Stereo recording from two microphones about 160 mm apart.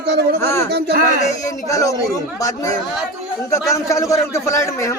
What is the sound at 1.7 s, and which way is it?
Speech, 20° left (ahead or behind).